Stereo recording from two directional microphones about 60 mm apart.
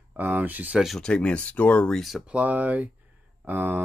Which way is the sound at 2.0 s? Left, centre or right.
Centre.